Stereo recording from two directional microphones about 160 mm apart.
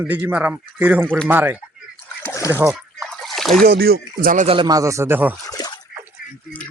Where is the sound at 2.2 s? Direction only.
15° left (ahead or behind).